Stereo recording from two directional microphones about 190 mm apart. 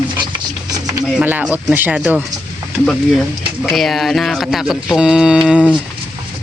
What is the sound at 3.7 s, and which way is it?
Speech, centre (ahead or behind).